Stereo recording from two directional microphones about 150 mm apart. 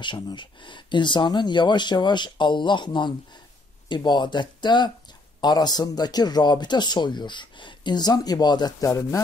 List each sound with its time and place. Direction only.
0.0 s speech: 30° left (ahead or behind)